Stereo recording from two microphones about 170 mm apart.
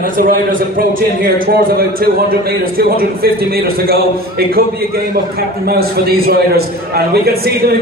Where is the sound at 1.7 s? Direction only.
60° right (ahead or behind).